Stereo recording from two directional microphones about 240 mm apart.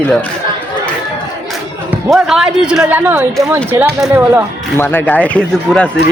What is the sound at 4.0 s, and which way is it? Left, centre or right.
Music, centre.